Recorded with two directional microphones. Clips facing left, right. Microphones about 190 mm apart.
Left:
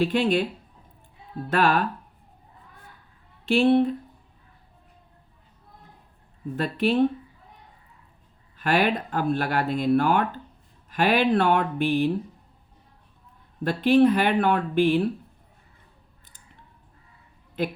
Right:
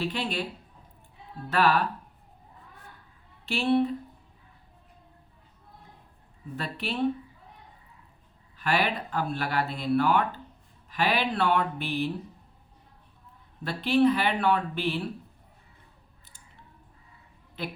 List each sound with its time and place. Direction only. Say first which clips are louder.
0.0 s speech: left 9 dB; 50° left (ahead or behind)
1.5 s speech: left 2 dB; 50° left (ahead or behind)
3.4 s speech: left 6 dB; 50° left (ahead or behind)
6.6 s speech: left 10 dB; 50° left (ahead or behind)
8.5 s speech: left 5 dB; 50° left (ahead or behind)
13.7 s speech: left 4 dB; 50° left (ahead or behind)
17.6 s speech: left 8 dB; 50° left (ahead or behind)